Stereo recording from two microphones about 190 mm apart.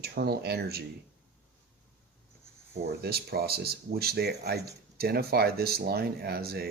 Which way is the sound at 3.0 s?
55° right (ahead or behind).